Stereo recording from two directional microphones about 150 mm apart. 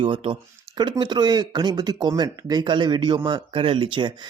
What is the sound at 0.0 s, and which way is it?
Speech, 35° right (ahead or behind).